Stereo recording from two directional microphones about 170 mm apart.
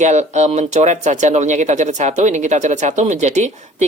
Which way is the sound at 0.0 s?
45° right (ahead or behind).